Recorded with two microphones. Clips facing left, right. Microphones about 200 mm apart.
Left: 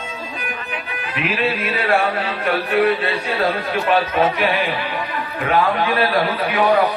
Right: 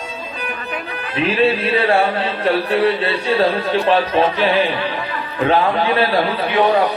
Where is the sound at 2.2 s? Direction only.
30° right (ahead or behind).